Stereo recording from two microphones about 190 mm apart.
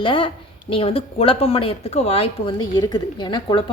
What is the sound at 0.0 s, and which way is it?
Speech, 25° left (ahead or behind).